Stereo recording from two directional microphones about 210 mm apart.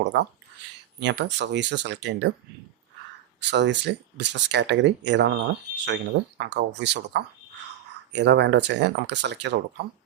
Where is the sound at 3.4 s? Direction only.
55° right (ahead or behind).